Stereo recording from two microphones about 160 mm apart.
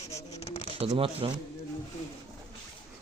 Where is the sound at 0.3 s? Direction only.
40° left (ahead or behind).